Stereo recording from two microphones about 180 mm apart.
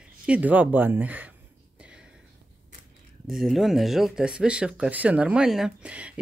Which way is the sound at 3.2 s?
Centre (ahead or behind).